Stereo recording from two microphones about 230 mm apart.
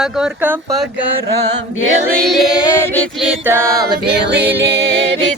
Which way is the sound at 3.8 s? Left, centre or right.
Right.